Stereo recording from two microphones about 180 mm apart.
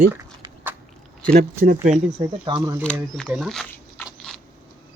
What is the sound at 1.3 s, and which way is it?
Speech, 50° right (ahead or behind).